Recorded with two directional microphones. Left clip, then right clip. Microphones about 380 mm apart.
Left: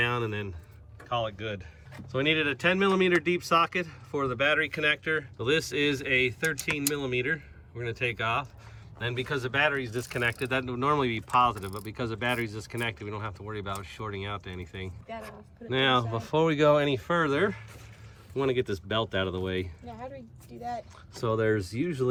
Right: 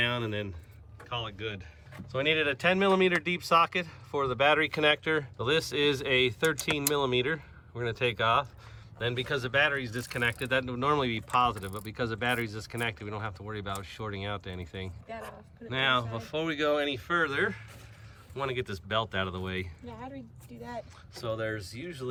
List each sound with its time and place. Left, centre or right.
0.0 s a sound: centre
1.1 s speech: centre
21.1 s speech: centre